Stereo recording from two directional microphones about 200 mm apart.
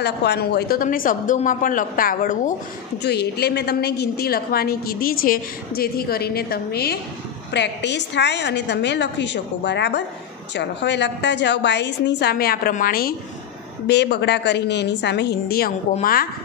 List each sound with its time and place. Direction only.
0.0 s a woman's voice: 55° left (ahead or behind)
3.0 s a woman's voice: 55° left (ahead or behind)